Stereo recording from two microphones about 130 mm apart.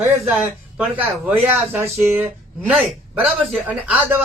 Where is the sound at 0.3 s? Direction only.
10° right (ahead or behind).